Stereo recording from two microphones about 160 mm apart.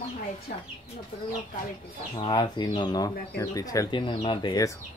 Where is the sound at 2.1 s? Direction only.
30° left (ahead or behind).